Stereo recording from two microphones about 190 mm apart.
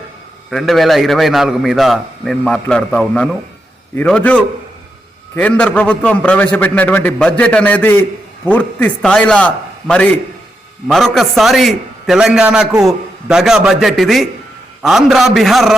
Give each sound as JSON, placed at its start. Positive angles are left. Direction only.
{"t": 0.5, "sound": "a man's voice", "side_deg": 0}